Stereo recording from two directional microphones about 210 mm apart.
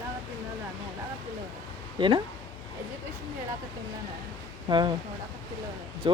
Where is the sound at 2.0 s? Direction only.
20° right (ahead or behind).